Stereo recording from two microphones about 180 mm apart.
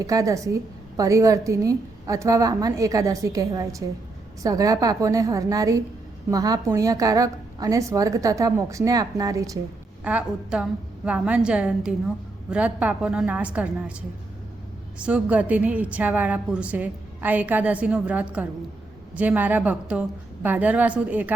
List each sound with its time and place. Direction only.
0.0 s a woman's voice: 20° right (ahead or behind)
10.0 s a woman's voice: 5° right (ahead or behind)
14.9 s a woman's voice: 5° right (ahead or behind)